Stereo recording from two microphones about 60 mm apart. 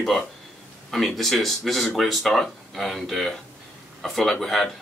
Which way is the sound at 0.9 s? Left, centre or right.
Centre.